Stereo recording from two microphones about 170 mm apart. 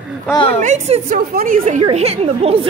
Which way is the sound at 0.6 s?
45° right (ahead or behind).